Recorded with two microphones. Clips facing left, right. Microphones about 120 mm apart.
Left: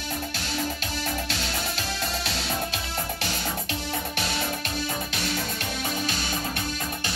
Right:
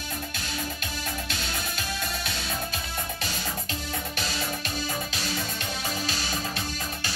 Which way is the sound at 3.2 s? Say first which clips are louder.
Left 3 dB; 70° left (ahead or behind).